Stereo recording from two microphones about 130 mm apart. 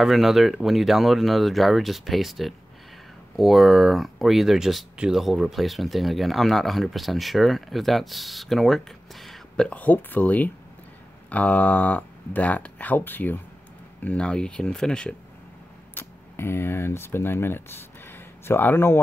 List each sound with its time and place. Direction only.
0.0 s speech: centre (ahead or behind)
15.9 s speech: 20° left (ahead or behind)